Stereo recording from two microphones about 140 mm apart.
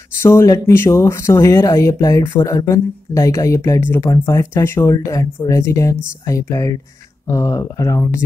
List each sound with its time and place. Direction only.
0.2 s speech: 20° left (ahead or behind)